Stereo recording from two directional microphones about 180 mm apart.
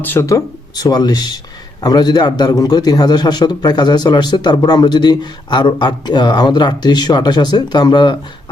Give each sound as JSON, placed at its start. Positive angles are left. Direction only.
{"t": 0.0, "sound": "a man's voice", "side_deg": 15}